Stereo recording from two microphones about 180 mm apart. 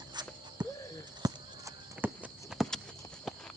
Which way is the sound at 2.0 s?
5° right (ahead or behind).